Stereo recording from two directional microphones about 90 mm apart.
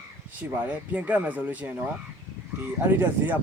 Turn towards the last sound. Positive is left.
turn(degrees=-20)  # may be behind; listen again after turning